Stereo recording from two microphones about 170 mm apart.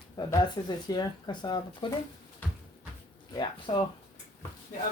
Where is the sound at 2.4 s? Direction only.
10° left (ahead or behind).